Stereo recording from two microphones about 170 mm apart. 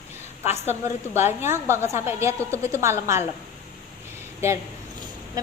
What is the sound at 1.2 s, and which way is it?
A woman's voice, 15° right (ahead or behind).